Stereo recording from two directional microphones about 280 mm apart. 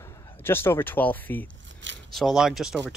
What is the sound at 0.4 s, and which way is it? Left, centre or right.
Speech, centre.